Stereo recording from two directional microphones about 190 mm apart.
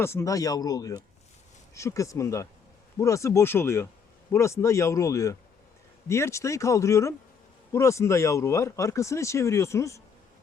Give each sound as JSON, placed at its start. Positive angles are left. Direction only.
{"t": 0.0, "sound": "speech", "side_deg": 15}